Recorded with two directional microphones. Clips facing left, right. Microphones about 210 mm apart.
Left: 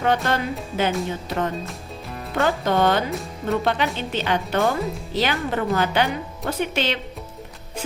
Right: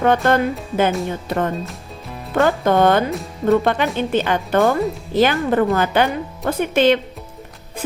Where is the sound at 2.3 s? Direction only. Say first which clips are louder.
Right 5 dB; 55° right (ahead or behind).